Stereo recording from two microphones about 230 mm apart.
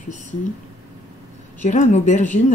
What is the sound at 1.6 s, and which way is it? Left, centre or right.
Speech, left.